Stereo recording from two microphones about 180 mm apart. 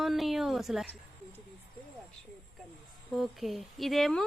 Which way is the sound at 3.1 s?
Centre (ahead or behind).